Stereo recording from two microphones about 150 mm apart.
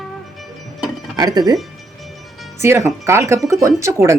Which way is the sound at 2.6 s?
20° right (ahead or behind).